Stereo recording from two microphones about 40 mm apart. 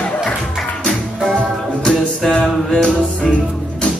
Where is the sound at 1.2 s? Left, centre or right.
Centre.